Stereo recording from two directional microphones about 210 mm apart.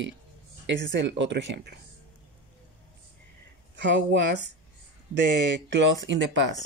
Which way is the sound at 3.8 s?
55° right (ahead or behind).